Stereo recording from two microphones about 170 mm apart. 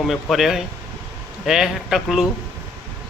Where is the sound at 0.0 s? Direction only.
Centre (ahead or behind).